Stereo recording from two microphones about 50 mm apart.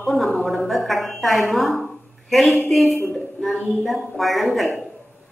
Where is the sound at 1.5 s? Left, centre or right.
Centre.